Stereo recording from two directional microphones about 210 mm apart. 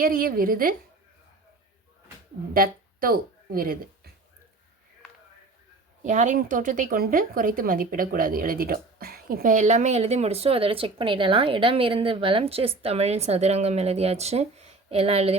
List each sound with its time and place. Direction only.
0.0 s a woman's voice: 45° right (ahead or behind)
2.5 s speech: 45° right (ahead or behind)
6.0 s a woman's voice: 35° right (ahead or behind)